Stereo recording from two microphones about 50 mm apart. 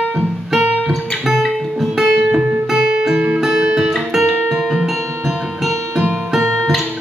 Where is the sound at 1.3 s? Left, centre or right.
Centre.